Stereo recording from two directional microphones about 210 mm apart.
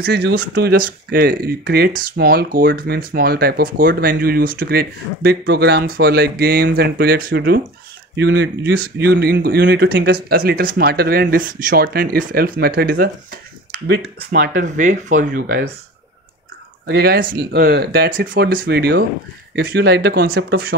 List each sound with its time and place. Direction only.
0.0 s speech: 50° right (ahead or behind)
16.9 s speech: 45° right (ahead or behind)